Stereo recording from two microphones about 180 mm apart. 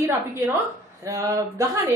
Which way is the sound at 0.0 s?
10° right (ahead or behind).